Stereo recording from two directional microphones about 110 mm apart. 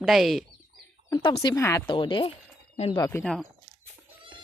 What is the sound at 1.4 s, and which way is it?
Speech, 30° left (ahead or behind).